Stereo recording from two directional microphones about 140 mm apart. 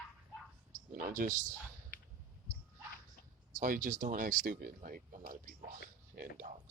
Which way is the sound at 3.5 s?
70° right (ahead or behind).